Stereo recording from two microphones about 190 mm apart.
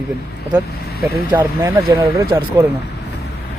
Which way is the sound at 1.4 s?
10° right (ahead or behind).